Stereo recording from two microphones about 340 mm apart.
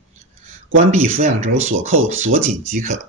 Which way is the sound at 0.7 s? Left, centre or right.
Right.